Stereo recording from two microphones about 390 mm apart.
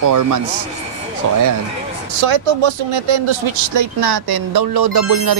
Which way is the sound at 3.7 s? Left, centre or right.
Right.